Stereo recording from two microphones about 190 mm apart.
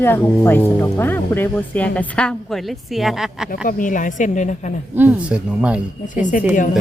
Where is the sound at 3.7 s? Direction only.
45° left (ahead or behind).